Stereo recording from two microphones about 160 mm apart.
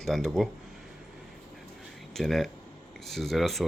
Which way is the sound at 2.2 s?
Centre (ahead or behind).